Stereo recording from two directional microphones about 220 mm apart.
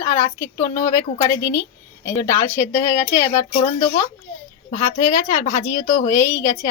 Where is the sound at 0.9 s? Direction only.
15° left (ahead or behind).